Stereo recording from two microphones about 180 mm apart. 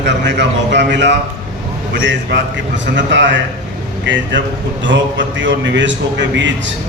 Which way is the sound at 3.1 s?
85° right.